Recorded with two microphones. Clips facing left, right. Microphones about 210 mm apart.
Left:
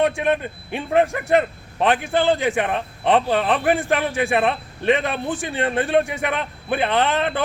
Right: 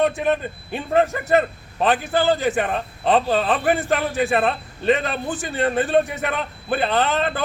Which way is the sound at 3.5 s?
Centre (ahead or behind).